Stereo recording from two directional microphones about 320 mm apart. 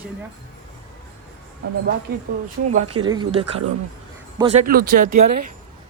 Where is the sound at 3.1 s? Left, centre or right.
Centre.